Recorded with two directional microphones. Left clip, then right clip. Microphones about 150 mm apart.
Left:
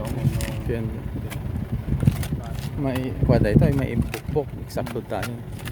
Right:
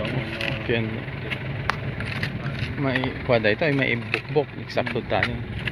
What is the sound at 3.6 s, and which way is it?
Speech, 30° left (ahead or behind).